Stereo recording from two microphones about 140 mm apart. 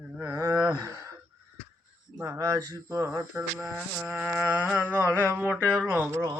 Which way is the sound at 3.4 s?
Centre (ahead or behind).